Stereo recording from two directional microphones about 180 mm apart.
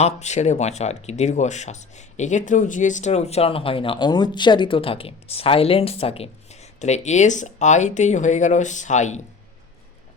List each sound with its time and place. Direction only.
0.0 s speech: 40° left (ahead or behind)